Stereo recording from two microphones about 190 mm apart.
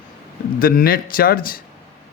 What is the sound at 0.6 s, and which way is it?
Speech, 50° left (ahead or behind).